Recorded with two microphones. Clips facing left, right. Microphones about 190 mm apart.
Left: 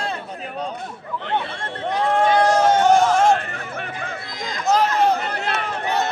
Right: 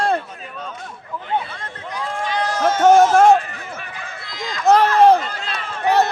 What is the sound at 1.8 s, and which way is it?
Run, 65° left (ahead or behind).